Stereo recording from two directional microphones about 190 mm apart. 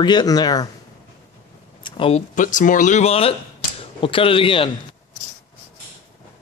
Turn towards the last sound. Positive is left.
turn(degrees=30)  # may be behind; listen again after turning